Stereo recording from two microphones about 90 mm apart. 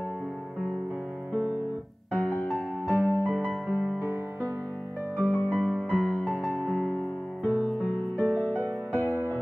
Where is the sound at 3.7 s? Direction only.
5° right (ahead or behind).